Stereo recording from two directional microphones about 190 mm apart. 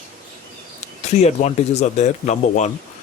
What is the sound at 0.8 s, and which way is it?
Speech, 35° left (ahead or behind).